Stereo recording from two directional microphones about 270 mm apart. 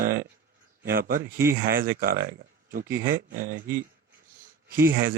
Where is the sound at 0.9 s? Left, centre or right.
Right.